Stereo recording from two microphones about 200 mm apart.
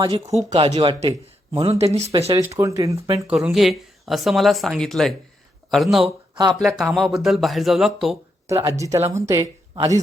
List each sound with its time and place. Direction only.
0.0 s speech: 20° right (ahead or behind)
2.4 s speech: 15° right (ahead or behind)
3.2 s speech: 5° right (ahead or behind)
6.1 s speech: 25° right (ahead or behind)
6.6 s speech: centre (ahead or behind)
8.4 s speech: 15° right (ahead or behind)